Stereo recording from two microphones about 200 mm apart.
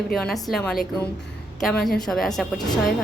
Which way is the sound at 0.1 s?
5° left (ahead or behind).